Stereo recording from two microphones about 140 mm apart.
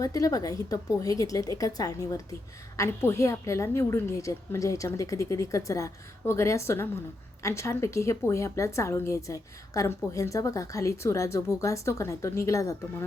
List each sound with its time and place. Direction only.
0.0 s a woman's voice: 25° left (ahead or behind)